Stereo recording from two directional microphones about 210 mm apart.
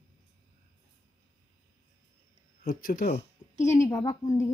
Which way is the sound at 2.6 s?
40° left (ahead or behind).